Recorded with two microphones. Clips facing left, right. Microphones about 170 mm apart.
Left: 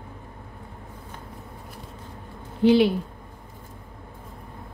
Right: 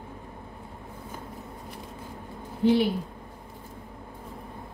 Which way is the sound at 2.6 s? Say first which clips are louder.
Left 4 dB; 85° left.